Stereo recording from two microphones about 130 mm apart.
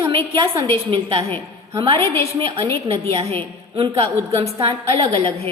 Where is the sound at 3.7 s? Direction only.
45° right (ahead or behind).